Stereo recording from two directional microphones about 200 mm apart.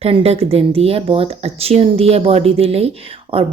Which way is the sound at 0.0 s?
30° right (ahead or behind).